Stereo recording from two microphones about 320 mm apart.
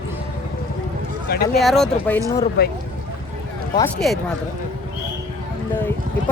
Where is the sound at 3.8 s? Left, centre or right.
Centre.